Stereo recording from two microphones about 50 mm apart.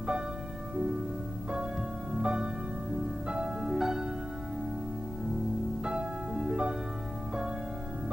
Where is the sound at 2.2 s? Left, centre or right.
Centre.